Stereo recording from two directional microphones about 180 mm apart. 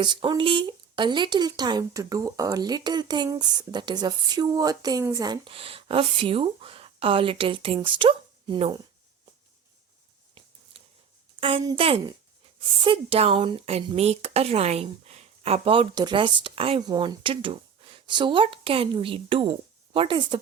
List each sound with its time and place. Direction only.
0.0 s speech: 25° right (ahead or behind)
10.8 s a sound: 30° right (ahead or behind)
11.3 s speech: 30° right (ahead or behind)